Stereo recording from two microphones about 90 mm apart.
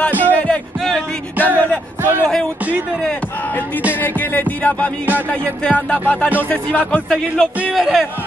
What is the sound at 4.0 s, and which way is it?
Speech, 20° left (ahead or behind).